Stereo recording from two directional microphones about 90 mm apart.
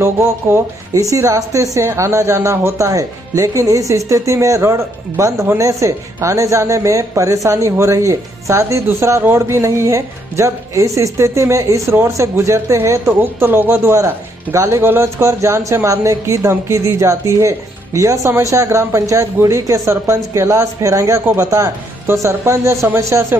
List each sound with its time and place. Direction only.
0.0 s speech: 30° right (ahead or behind)